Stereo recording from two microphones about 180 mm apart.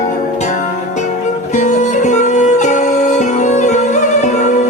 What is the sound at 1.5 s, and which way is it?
Music, 40° left (ahead or behind).